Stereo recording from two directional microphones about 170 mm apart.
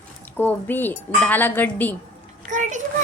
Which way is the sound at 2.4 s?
45° right (ahead or behind).